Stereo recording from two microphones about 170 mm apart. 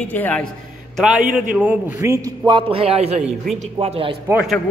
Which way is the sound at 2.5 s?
30° right (ahead or behind).